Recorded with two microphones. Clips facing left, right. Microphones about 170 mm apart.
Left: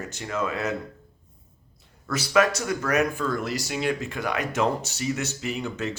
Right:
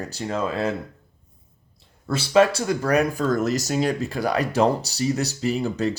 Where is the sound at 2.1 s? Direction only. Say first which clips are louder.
Right 4 dB; 30° right (ahead or behind).